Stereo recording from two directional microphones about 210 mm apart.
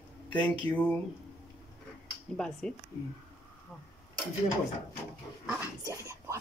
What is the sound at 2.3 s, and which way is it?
Music, 5° left (ahead or behind).